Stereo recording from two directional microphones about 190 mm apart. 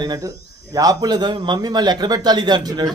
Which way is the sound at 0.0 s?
20° right (ahead or behind).